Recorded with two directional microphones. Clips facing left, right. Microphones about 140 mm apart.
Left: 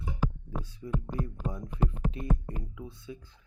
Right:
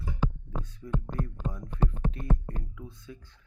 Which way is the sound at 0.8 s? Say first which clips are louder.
Even; 10° left (ahead or behind).